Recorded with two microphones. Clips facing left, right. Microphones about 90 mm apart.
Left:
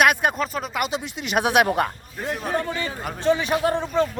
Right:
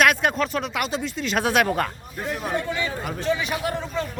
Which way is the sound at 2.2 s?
Centre (ahead or behind).